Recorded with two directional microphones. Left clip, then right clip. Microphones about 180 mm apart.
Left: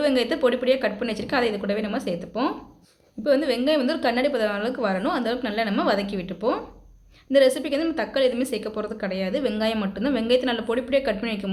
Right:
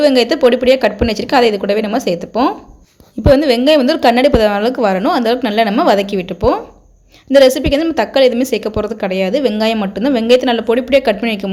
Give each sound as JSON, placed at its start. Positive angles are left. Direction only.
{"t": 0.0, "sound": "a woman's voice", "side_deg": -30}